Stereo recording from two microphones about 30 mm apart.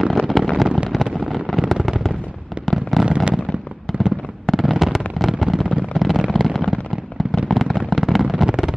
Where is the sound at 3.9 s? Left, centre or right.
Centre.